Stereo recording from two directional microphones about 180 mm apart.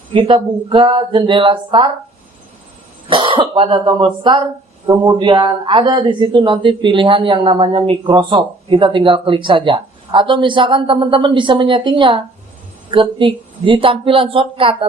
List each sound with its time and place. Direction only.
0.1 s speech: 30° right (ahead or behind)
3.1 s a man's voice: 30° right (ahead or behind)